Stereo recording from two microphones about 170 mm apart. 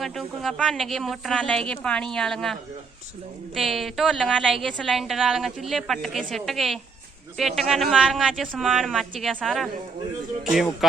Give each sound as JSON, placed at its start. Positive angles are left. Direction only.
{"t": 0.0, "sound": "a woman's voice", "side_deg": 0}